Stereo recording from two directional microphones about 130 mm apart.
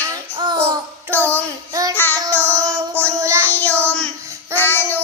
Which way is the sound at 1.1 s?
15° left (ahead or behind).